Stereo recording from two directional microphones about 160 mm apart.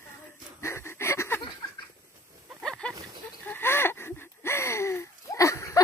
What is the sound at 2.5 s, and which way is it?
Pig, 5° left (ahead or behind).